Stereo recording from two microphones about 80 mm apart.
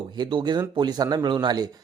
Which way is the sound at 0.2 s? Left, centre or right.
Right.